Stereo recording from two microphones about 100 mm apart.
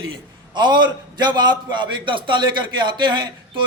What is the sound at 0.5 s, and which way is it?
A man's voice, 50° right (ahead or behind).